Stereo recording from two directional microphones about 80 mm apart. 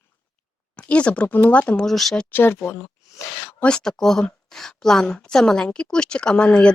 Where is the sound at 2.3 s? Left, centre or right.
Left.